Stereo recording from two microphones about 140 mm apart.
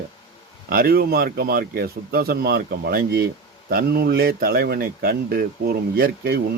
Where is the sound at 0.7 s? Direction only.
90° right.